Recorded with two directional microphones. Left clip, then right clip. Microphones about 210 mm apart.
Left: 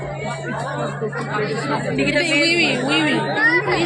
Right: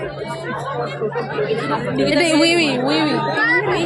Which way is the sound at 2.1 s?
45° right (ahead or behind).